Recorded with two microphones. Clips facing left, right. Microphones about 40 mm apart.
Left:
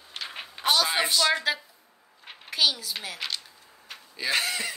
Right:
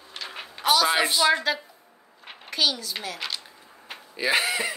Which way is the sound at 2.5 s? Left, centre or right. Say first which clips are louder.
Even; centre.